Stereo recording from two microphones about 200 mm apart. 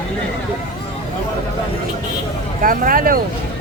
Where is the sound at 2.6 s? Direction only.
45° right (ahead or behind).